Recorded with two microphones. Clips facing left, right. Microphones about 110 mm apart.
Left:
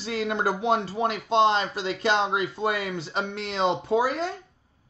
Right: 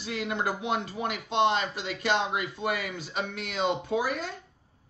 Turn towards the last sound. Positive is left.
turn(degrees=30)  # may be behind; listen again after turning